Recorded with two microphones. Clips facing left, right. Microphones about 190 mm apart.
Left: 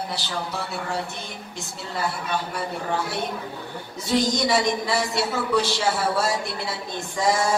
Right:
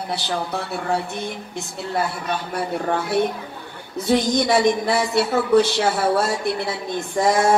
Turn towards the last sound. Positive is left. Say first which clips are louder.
# right 5 dB
turn(degrees=-60)  # may be behind; listen again after turning